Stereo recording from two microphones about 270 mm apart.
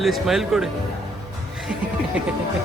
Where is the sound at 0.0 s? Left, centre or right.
Centre.